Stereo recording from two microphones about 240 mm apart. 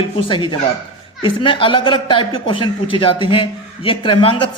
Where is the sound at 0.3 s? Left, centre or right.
Left.